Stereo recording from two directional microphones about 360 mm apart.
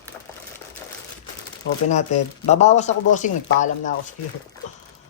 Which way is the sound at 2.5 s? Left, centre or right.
Centre.